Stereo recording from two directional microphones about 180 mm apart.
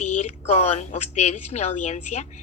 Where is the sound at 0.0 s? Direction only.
40° left (ahead or behind).